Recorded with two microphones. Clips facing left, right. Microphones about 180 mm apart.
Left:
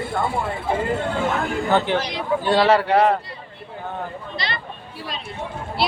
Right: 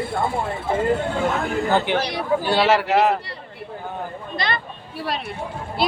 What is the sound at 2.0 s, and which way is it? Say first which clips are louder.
Speech: right 1 dB; 65° right (ahead or behind).